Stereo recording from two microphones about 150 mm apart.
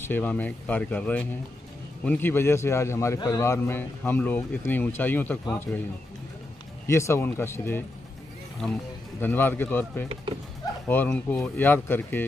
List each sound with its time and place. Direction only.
0.0 s speech: 10° left (ahead or behind)
6.9 s speech: 20° left (ahead or behind)
8.6 s speech: 5° left (ahead or behind)